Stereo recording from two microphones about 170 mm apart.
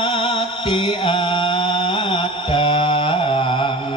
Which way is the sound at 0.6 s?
30° left (ahead or behind).